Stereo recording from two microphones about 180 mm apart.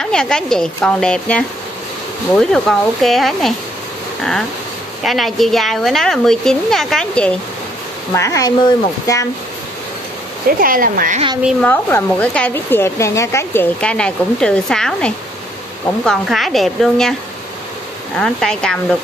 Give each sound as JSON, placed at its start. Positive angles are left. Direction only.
{"t": 0.0, "sound": "speech", "side_deg": 5}
{"t": 8.1, "sound": "speech", "side_deg": 15}
{"t": 10.6, "sound": "speech", "side_deg": -50}
{"t": 11.6, "sound": "speech", "side_deg": 10}
{"t": 18.1, "sound": "speech", "side_deg": 5}